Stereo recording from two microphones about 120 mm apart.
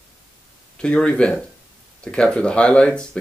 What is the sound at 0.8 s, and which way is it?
Speech, 10° left (ahead or behind).